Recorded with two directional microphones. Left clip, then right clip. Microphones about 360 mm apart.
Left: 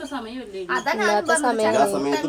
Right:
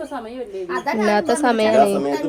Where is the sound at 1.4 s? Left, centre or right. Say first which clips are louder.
Right 4 dB; centre.